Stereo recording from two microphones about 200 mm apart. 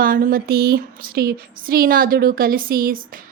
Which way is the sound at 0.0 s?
45° right (ahead or behind).